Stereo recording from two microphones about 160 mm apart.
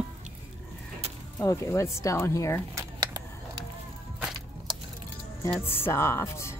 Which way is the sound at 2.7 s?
25° right (ahead or behind).